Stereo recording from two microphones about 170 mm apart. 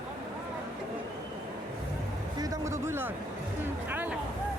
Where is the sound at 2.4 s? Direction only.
20° right (ahead or behind).